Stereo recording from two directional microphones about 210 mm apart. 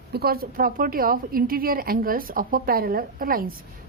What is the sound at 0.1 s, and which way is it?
A woman's voice, 45° right (ahead or behind).